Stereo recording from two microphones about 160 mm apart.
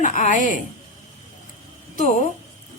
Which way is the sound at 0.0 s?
50° left (ahead or behind).